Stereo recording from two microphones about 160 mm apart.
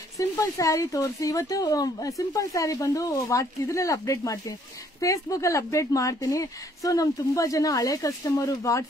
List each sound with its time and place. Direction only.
0.2 s speech: 20° left (ahead or behind)